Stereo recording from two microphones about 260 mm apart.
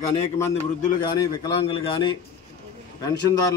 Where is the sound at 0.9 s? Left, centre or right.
Centre.